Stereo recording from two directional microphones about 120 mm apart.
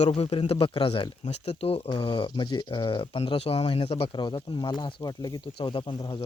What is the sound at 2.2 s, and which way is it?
Speech, 35° left (ahead or behind).